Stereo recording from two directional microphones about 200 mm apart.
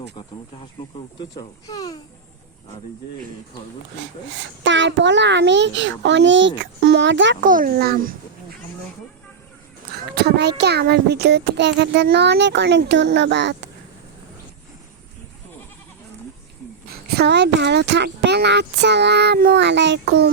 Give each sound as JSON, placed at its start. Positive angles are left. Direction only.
{"t": 1.2, "sound": "speech", "side_deg": 20}
{"t": 4.3, "sound": "a child's voice", "side_deg": -65}
{"t": 7.4, "sound": "a child's voice", "side_deg": -45}
{"t": 10.2, "sound": "a child's voice", "side_deg": -55}
{"t": 16.9, "sound": "a child's voice", "side_deg": -50}